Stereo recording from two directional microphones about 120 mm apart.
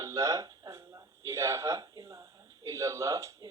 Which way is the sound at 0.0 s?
30° right (ahead or behind).